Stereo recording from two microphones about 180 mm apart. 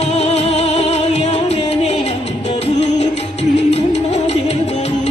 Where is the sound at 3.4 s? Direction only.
75° left (ahead or behind).